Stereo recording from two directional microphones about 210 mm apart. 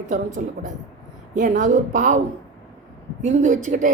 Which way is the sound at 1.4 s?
35° right (ahead or behind).